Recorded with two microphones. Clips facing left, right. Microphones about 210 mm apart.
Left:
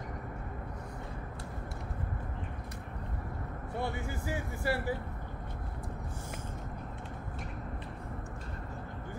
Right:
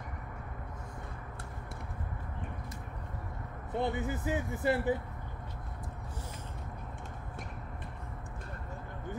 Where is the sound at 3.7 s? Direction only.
20° right (ahead or behind).